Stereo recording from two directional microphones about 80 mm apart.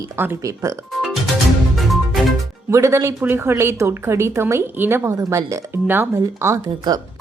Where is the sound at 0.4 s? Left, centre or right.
Right.